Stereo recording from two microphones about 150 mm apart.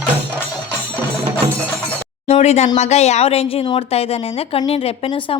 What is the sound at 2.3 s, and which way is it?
A woman's voice, 45° left (ahead or behind).